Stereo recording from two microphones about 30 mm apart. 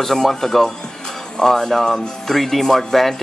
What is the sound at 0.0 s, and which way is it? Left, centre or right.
Speech, centre.